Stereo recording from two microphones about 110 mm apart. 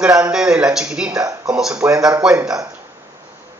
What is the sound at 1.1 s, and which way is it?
Speech, 30° right (ahead or behind).